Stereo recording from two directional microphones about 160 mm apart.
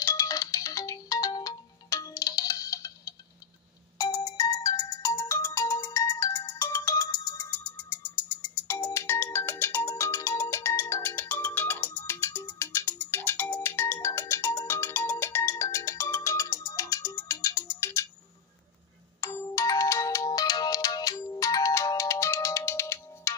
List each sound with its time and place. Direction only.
0.0 s ringtone: 20° left (ahead or behind)
19.2 s ringtone: 15° left (ahead or behind)